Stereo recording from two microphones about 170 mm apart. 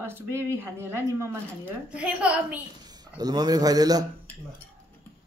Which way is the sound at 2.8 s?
25° right (ahead or behind).